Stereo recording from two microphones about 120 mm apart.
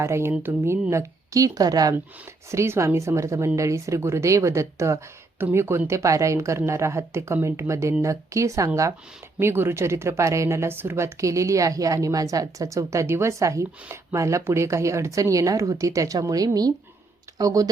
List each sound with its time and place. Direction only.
0.0 s speech: 20° right (ahead or behind)